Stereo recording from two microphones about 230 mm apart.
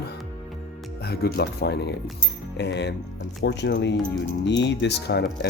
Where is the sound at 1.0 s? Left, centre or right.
Left.